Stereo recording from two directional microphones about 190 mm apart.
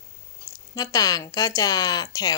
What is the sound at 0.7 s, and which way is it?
Speech, 20° left (ahead or behind).